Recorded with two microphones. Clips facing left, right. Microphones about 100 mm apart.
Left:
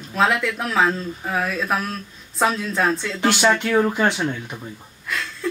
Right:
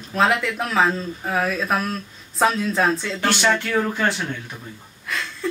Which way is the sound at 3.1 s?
15° left (ahead or behind).